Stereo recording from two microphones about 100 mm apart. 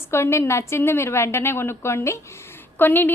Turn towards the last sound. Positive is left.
turn(degrees=20)  # may be behind; listen again after turning